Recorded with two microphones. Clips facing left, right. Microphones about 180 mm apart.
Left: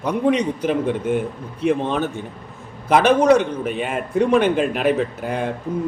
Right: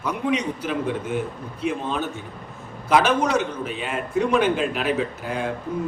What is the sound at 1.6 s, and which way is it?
A man's voice, 55° left (ahead or behind).